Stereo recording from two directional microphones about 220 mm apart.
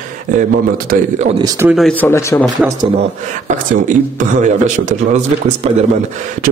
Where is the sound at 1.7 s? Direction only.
5° left (ahead or behind).